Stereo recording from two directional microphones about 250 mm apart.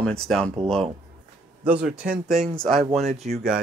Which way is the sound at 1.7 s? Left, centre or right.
Centre.